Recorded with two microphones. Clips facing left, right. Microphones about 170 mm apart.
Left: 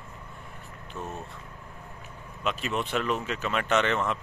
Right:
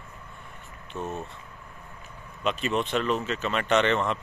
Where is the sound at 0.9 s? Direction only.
20° right (ahead or behind).